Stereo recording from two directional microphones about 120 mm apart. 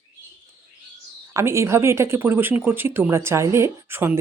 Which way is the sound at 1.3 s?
25° right (ahead or behind).